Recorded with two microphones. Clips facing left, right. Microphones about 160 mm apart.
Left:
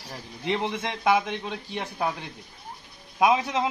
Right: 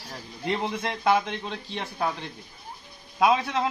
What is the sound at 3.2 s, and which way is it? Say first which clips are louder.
Speech: even; 15° left (ahead or behind).